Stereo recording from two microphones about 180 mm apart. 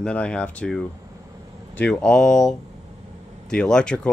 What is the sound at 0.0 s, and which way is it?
Speech, 5° left (ahead or behind).